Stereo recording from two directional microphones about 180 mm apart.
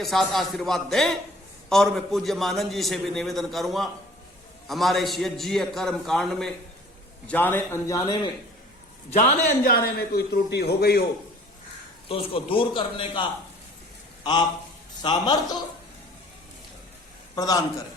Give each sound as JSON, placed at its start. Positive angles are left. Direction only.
{"t": 0.0, "sound": "a man's voice", "side_deg": 0}
{"t": 9.0, "sound": "a man's voice", "side_deg": 35}
{"t": 9.6, "sound": "a man's voice", "side_deg": 55}
{"t": 12.0, "sound": "a man's voice", "side_deg": 30}
{"t": 15.0, "sound": "a man's voice", "side_deg": 25}
{"t": 17.3, "sound": "a man's voice", "side_deg": 20}